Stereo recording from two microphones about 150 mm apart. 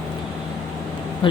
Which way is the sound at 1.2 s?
35° left (ahead or behind).